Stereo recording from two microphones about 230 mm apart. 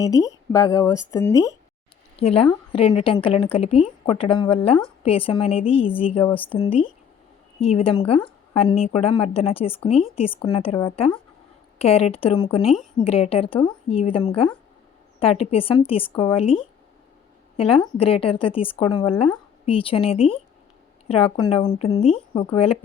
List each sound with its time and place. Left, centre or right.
0.0 s speech: centre
2.1 s a woman's voice: left
17.6 s a woman's voice: left